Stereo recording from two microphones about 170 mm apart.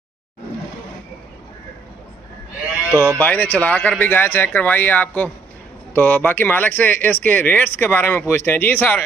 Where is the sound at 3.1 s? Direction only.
10° left (ahead or behind).